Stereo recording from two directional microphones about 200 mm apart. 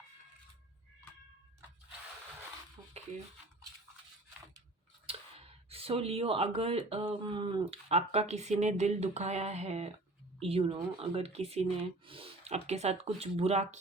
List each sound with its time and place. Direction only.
5.0 s speech: 30° right (ahead or behind)